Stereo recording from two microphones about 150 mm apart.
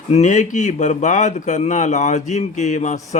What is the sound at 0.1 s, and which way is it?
Speech, 50° left (ahead or behind).